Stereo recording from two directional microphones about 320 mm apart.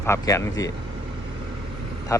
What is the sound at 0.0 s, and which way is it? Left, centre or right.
Speech, centre.